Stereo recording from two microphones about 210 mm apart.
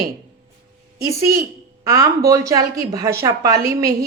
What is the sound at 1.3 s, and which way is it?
Speech, 45° right (ahead or behind).